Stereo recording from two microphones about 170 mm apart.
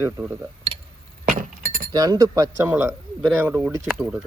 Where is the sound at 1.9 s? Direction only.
20° right (ahead or behind); by 4.2 s 5° right (ahead or behind).